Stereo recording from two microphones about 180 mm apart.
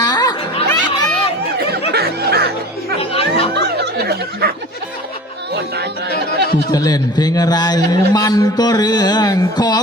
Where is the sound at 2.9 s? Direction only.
30° left (ahead or behind).